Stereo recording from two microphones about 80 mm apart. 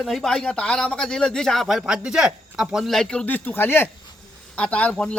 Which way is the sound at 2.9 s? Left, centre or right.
Centre.